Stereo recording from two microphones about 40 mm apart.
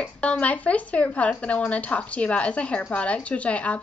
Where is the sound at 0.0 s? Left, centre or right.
Left.